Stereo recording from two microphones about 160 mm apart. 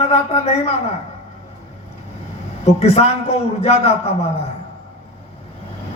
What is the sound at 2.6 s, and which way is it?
A man's voice, 40° left (ahead or behind).